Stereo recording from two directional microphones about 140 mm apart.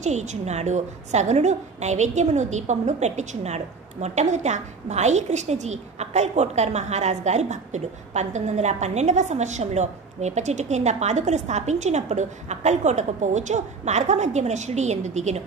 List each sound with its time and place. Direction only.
0.0 s a woman's voice: 55° right (ahead or behind)